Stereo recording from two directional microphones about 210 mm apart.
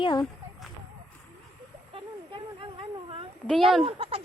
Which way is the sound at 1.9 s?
25° right (ahead or behind).